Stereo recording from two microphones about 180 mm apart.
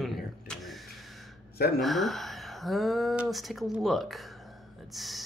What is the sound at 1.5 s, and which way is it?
Speech, 60° left (ahead or behind).